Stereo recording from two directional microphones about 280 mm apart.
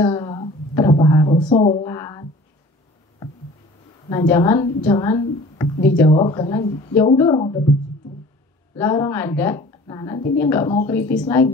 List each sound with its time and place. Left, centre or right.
0.0 s a sound: centre
1.5 s speech: left
4.1 s a woman's voice: centre
8.7 s a woman's voice: centre